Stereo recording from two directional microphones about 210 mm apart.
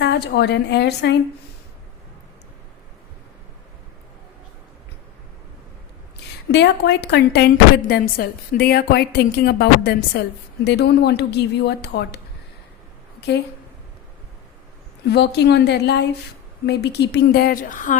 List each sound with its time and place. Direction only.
0.0 s a woman's voice: 50° left (ahead or behind)
6.5 s a woman's voice: 55° left (ahead or behind)
15.0 s a woman's voice: 50° left (ahead or behind)